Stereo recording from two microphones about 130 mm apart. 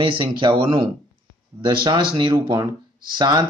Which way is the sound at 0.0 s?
40° right (ahead or behind).